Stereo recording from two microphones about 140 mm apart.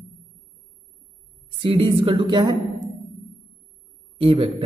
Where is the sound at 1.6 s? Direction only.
40° right (ahead or behind).